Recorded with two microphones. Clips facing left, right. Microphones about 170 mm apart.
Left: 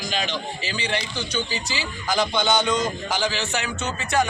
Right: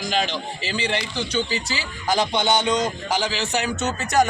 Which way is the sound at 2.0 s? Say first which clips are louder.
Right 1 dB; 30° right (ahead or behind).